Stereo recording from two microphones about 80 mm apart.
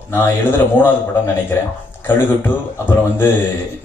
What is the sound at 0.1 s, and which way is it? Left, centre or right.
A man's voice, left.